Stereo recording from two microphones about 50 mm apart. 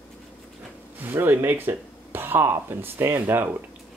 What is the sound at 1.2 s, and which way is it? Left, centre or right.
Speech, right.